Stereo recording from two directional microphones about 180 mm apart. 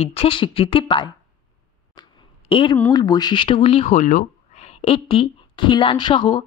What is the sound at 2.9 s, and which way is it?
Speech, 20° left (ahead or behind).